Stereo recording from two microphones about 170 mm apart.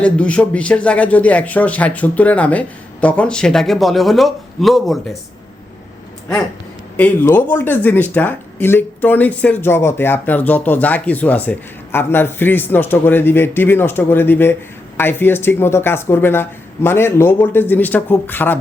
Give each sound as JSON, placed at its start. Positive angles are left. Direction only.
{"t": 0.0, "sound": "speech", "side_deg": 5}
{"t": 6.9, "sound": "speech", "side_deg": 10}